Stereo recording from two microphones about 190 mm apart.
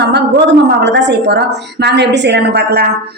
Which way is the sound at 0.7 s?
65° right (ahead or behind).